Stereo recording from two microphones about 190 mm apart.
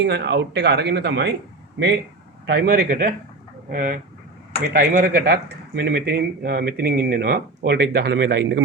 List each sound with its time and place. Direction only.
0.0 s speech: 65° right (ahead or behind)
2.5 s speech: 55° right (ahead or behind)